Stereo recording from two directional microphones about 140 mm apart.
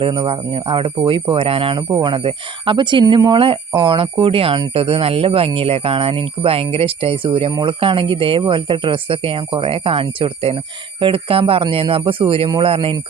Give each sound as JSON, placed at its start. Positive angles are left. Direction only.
{"t": 0.0, "sound": "speech", "side_deg": -35}
{"t": 1.9, "sound": "speech", "side_deg": -30}